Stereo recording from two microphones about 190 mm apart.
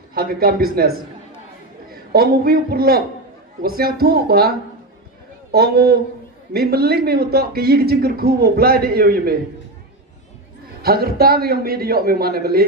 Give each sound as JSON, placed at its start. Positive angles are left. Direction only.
{"t": 0.1, "sound": "a woman's voice", "side_deg": -50}
{"t": 10.8, "sound": "a man's voice", "side_deg": -55}